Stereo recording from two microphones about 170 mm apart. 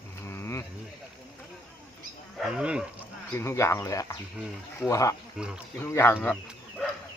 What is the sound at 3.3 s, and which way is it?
Speech, 15° left (ahead or behind).